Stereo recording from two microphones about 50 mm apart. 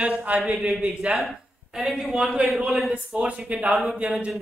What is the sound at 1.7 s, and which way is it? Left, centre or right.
A woman's voice, centre.